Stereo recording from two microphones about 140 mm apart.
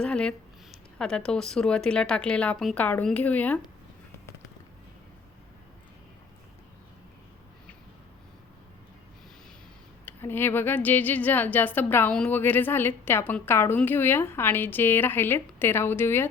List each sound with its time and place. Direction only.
0.0 s a woman's voice: 5° left (ahead or behind)
10.1 s a woman's voice: 15° left (ahead or behind)